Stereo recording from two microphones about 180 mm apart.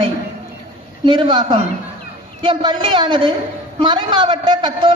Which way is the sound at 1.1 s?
25° right (ahead or behind).